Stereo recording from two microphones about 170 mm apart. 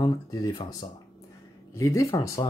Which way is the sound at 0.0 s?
25° left (ahead or behind).